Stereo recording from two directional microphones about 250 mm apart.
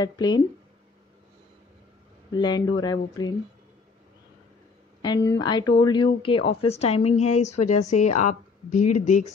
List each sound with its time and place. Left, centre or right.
0.0 s speech: centre
2.3 s speech: centre
5.0 s a woman's voice: centre; by 9.3 s left